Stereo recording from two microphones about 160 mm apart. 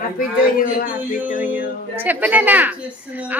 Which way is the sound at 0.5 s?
60° left (ahead or behind).